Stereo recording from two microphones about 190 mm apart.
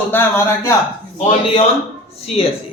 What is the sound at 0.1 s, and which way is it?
Speech, 10° left (ahead or behind).